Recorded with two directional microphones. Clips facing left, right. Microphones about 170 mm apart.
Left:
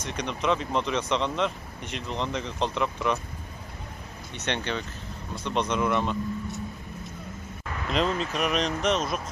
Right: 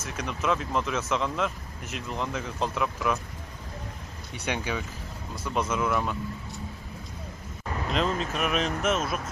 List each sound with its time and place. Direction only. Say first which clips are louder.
0.0 s speech: left 2 dB; 5° right (ahead or behind)
4.3 s speech: even; 10° right (ahead or behind)
7.9 s speech: left 2 dB; centre (ahead or behind)